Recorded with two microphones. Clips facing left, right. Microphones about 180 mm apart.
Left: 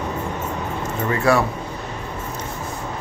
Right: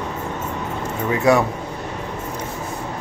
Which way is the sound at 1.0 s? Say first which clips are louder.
Right 2 dB; 20° right (ahead or behind).